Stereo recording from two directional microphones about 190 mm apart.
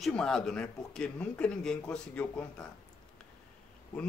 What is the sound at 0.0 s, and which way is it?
Speech, 5° left (ahead or behind).